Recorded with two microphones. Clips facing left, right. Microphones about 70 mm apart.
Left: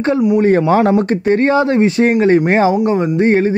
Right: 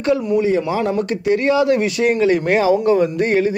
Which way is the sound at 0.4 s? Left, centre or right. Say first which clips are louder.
Left 6 dB; left.